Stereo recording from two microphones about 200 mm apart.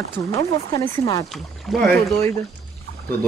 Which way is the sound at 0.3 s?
15° left (ahead or behind).